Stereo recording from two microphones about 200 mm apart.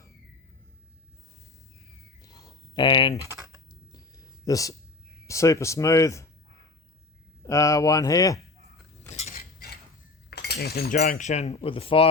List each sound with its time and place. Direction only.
2.2 s a sound: 20° left (ahead or behind)
5.2 s speech: 15° left (ahead or behind)
7.4 s speech: 15° left (ahead or behind)
9.0 s cutlery: 35° left (ahead or behind)
9.4 s cutlery: 50° left (ahead or behind)
10.2 s speech: 55° left (ahead or behind); by 12.0 s 25° left (ahead or behind)